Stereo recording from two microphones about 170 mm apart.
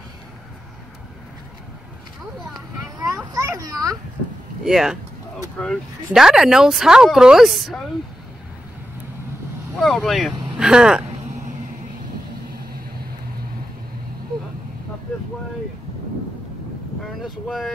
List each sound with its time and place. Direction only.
2.8 s children playing: 20° right (ahead or behind)
4.6 s speech: 5° right (ahead or behind)
9.8 s speech: centre (ahead or behind)
17.2 s wind noise: centre (ahead or behind)